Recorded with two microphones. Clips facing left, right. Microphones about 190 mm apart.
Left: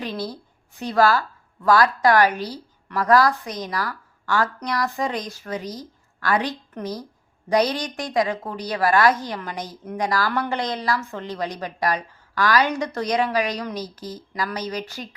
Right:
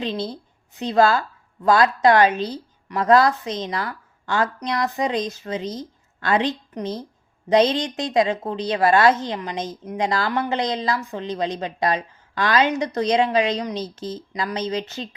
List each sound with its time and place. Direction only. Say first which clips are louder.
0.0 s a woman's voice: right 3 dB; 25° right (ahead or behind)